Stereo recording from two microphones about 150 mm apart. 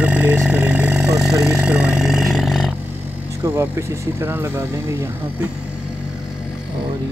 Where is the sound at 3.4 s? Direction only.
15° right (ahead or behind).